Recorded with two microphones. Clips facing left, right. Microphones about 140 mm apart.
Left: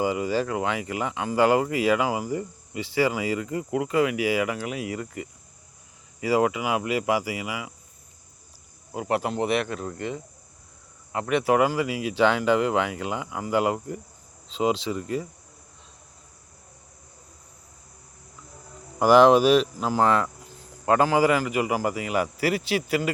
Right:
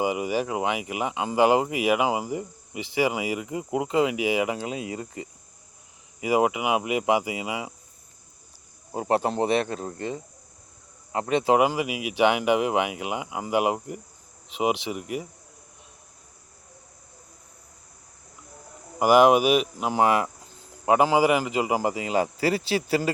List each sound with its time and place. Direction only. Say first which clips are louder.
0.0 s speech: left 1 dB; 15° right (ahead or behind)
8.9 s speech: right 2 dB; 30° right (ahead or behind); by 15.3 s 15° right (ahead or behind)
18.9 s speech: left 1 dB; 10° right (ahead or behind); by 23.1 s 30° right (ahead or behind)